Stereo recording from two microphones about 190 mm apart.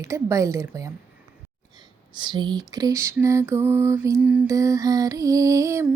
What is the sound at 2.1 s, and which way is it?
A woman's voice, 25° right (ahead or behind).